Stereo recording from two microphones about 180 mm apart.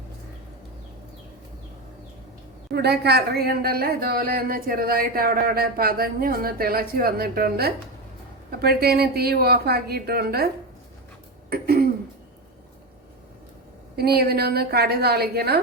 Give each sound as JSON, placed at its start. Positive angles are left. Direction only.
{"t": 2.7, "sound": "a woman's voice", "side_deg": -65}
{"t": 11.4, "sound": "throat clearing", "side_deg": -60}
{"t": 13.9, "sound": "a woman's voice", "side_deg": -60}